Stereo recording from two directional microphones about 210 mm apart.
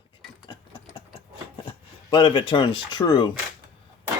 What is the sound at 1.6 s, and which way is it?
Speech, 20° left (ahead or behind).